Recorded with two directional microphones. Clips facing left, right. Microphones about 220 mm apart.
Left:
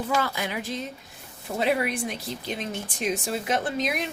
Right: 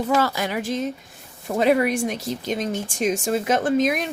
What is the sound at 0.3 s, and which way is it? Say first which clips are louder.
A woman's voice: right 6 dB; 45° right (ahead or behind).